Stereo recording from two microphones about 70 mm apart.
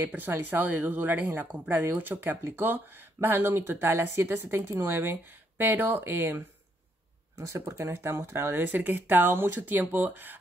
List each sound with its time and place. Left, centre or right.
0.0 s speech: right
7.3 s speech: right